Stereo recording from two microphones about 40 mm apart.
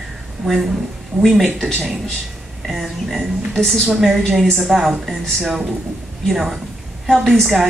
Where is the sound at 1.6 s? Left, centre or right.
Centre.